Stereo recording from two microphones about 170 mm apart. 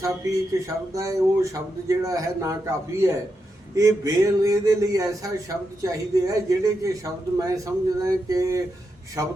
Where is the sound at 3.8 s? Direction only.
20° right (ahead or behind).